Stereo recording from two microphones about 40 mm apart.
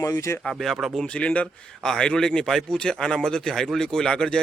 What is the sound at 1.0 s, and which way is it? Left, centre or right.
Speech, left.